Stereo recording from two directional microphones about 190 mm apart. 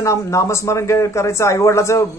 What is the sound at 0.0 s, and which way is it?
Speech, 15° left (ahead or behind).